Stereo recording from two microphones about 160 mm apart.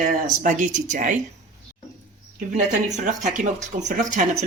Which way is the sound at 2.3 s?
50° right (ahead or behind).